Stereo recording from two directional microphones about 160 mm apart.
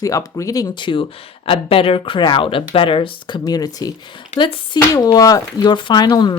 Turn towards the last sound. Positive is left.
turn(degrees=25)  # may be behind; listen again after turning